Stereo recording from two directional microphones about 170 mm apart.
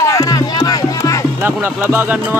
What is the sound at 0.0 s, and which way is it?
Music, 20° left (ahead or behind).